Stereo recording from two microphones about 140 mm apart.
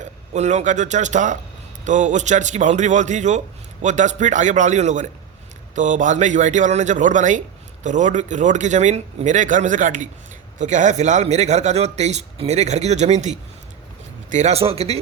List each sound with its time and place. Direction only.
0.0 s a man's voice: 55° right (ahead or behind)